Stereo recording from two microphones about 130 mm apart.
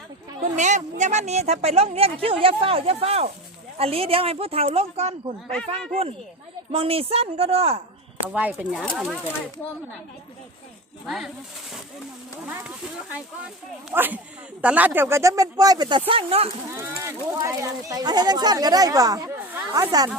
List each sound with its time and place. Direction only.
0.4 s a woman's voice: 65° right (ahead or behind); by 7.8 s 50° right (ahead or behind)
8.3 s speech: 10° right (ahead or behind)
11.0 s speech: centre (ahead or behind)
13.9 s speech: 15° right (ahead or behind); by 16.5 s 45° right (ahead or behind)
16.7 s speech: 20° right (ahead or behind)